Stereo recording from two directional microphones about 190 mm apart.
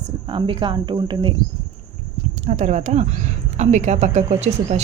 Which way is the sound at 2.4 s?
40° right (ahead or behind).